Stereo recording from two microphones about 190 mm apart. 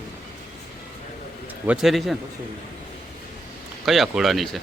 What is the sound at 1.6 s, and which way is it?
Speech, 5° right (ahead or behind).